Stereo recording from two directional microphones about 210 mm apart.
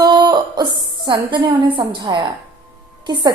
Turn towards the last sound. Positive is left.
turn(degrees=-20)  # may be behind; listen again after turning